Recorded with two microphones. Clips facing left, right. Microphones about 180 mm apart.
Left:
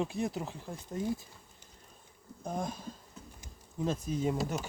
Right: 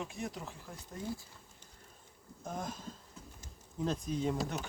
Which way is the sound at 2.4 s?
15° left (ahead or behind).